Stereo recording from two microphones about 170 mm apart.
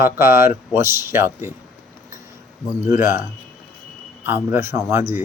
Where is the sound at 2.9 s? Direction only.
45° left (ahead or behind).